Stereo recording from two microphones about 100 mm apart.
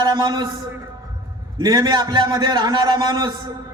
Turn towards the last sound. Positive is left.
turn(degrees=-45)  # may be behind; listen again after turning